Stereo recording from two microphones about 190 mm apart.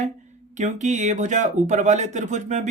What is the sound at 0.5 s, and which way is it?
Speech, 40° right (ahead or behind).